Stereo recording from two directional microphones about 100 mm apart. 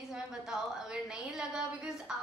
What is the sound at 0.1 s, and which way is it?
A woman's voice, 5° right (ahead or behind).